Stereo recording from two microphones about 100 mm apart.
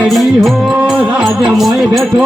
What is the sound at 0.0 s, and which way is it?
Music, centre (ahead or behind).